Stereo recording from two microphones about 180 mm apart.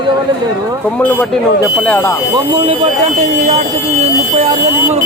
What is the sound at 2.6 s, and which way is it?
Speech, 40° right (ahead or behind).